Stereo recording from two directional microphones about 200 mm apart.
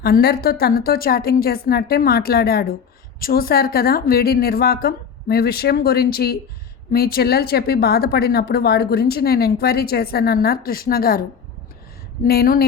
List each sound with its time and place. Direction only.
0.0 s speech: 50° left (ahead or behind)
12.2 s speech: 50° left (ahead or behind)